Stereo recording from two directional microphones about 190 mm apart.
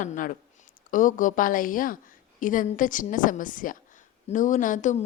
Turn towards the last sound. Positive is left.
turn(degrees=40)  # may be behind; listen again after turning